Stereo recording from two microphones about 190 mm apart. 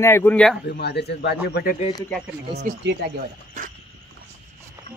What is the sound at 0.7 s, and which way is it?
Speech, 60° left (ahead or behind).